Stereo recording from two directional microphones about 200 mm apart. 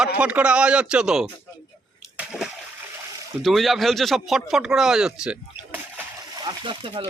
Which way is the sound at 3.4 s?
Centre (ahead or behind).